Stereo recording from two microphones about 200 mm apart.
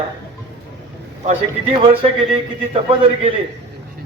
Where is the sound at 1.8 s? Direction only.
25° right (ahead or behind).